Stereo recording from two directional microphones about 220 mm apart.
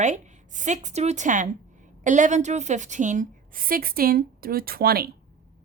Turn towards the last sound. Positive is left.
turn(degrees=-45)  # may be behind; listen again after turning